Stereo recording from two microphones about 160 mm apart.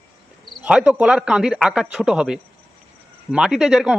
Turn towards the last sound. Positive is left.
turn(degrees=0)  # may be behind; listen again after turning